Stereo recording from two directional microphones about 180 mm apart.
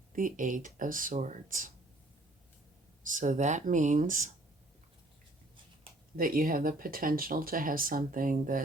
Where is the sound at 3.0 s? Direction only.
45° right (ahead or behind).